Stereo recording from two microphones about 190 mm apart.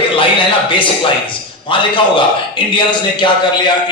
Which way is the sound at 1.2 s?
25° left (ahead or behind).